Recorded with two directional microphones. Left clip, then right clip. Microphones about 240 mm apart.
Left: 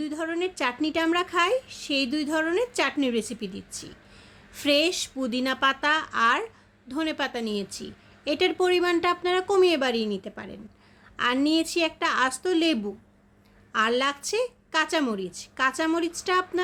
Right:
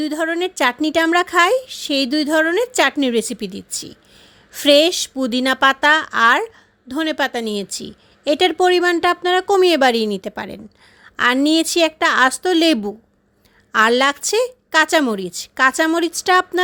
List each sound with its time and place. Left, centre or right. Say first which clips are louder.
0.0 s speech: right 9 dB; right